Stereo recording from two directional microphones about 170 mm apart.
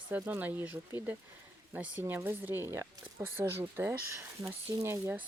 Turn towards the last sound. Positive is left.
turn(degrees=-15)  # may be behind; listen again after turning